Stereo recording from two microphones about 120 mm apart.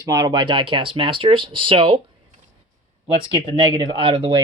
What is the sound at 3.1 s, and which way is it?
Speech, 50° right (ahead or behind).